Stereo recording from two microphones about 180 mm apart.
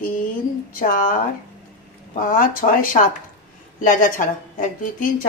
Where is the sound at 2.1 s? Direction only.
50° left (ahead or behind).